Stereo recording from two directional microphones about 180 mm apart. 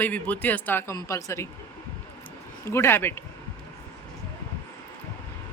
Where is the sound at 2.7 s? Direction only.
15° left (ahead or behind).